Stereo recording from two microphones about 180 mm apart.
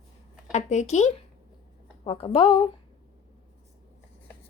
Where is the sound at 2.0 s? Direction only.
30° left (ahead or behind).